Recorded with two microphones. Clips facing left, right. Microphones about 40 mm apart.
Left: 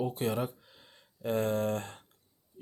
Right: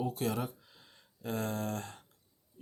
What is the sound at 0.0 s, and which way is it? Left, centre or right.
Speech, left.